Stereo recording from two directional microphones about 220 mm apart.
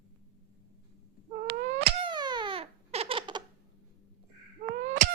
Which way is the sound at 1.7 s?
25° right (ahead or behind).